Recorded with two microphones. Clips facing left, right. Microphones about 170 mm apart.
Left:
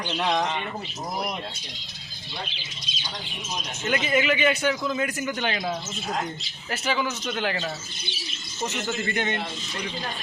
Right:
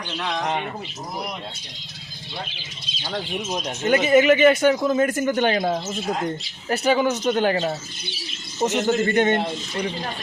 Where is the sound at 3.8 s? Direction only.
40° right (ahead or behind).